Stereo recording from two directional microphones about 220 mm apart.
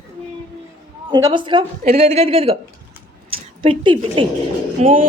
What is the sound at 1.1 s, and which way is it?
A man's voice, 20° right (ahead or behind).